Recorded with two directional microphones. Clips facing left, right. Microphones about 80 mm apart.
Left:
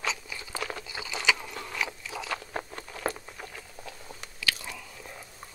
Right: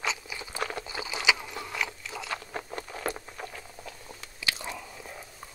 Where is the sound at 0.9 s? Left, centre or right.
Right.